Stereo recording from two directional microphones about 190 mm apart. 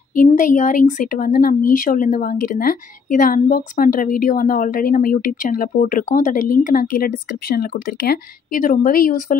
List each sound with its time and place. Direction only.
0.1 s speech: 45° left (ahead or behind)